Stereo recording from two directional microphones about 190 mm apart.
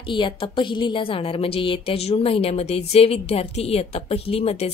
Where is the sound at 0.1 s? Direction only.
25° left (ahead or behind).